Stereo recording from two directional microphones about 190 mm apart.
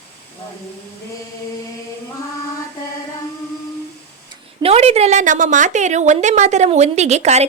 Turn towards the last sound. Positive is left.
turn(degrees=-35)  # may be behind; listen again after turning